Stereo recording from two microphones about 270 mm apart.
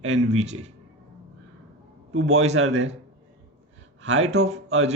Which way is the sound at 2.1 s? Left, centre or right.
Right.